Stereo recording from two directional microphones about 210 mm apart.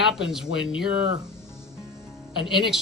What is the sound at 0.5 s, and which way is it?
Speech, 65° left (ahead or behind).